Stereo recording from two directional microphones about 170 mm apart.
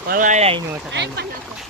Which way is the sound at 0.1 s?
50° right (ahead or behind).